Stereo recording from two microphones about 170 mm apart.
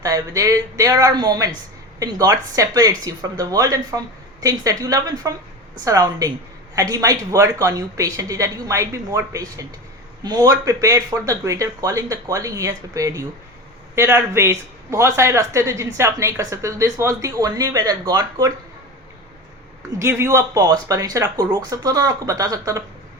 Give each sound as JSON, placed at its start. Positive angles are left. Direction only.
{"t": 0.0, "sound": "a woman's voice", "side_deg": -20}
{"t": 20.0, "sound": "speech", "side_deg": -15}